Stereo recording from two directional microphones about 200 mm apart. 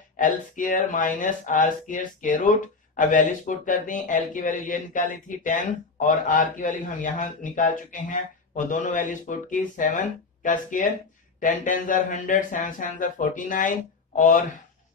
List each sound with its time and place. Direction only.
0.2 s speech: 40° left (ahead or behind)